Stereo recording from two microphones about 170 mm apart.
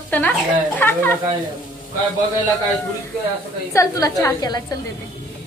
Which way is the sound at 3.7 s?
20° left (ahead or behind).